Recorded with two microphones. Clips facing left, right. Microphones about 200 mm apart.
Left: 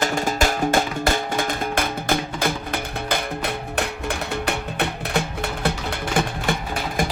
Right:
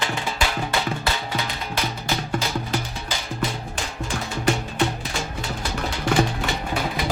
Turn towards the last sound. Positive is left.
turn(degrees=50)  # may be behind; listen again after turning